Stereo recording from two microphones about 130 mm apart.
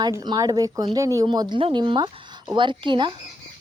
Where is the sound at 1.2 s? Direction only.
35° right (ahead or behind).